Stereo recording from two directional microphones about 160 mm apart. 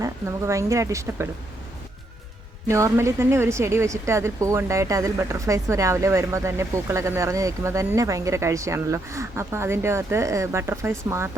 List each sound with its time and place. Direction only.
0.0 s speech: 20° right (ahead or behind)
2.6 s a woman's voice: 20° right (ahead or behind)